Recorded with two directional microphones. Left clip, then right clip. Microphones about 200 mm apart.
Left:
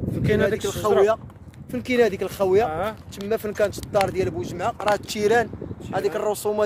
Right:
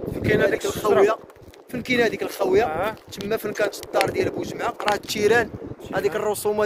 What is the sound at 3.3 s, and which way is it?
Speech, 35° left (ahead or behind).